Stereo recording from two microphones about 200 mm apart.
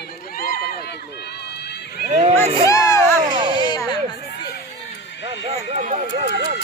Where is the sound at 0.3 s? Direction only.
50° left (ahead or behind).